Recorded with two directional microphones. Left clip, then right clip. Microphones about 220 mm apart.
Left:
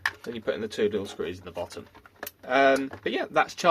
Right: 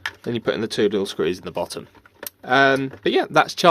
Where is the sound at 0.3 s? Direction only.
50° right (ahead or behind).